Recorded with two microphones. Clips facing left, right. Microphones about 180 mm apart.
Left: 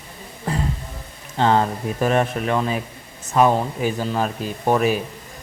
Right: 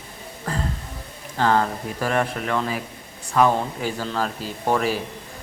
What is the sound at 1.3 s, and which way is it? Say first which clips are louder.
Speech: left 2 dB; 20° left (ahead or behind).